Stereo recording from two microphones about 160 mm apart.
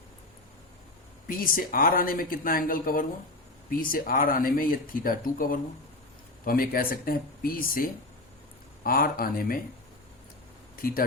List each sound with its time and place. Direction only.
1.3 s speech: 60° left (ahead or behind)
10.8 s speech: 65° left (ahead or behind)